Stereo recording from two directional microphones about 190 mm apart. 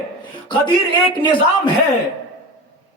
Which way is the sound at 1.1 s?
25° left (ahead or behind).